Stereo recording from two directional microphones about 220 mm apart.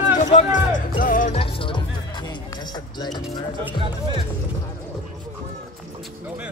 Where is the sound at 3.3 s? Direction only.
20° left (ahead or behind).